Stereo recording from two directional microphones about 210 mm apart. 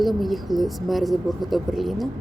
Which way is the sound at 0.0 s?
Centre (ahead or behind).